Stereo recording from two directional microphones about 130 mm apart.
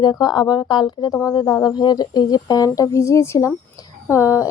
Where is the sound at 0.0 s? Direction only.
30° left (ahead or behind).